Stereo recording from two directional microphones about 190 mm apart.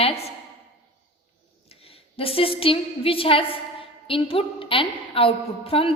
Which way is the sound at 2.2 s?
30° left (ahead or behind).